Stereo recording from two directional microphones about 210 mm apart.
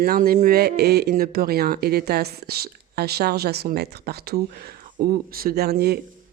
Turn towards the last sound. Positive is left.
turn(degrees=-50)  # may be behind; listen again after turning